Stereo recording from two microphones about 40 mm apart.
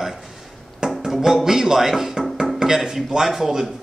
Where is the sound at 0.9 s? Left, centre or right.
Centre.